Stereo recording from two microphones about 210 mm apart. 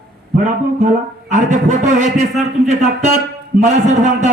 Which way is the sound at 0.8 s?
35° right (ahead or behind).